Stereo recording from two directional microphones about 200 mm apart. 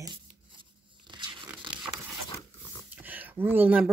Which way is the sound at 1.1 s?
25° right (ahead or behind).